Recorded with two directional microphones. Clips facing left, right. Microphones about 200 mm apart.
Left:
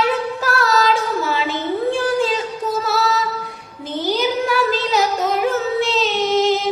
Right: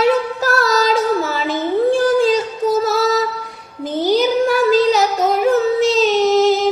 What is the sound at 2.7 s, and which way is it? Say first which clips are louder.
Music: right 5 dB; 40° right (ahead or behind).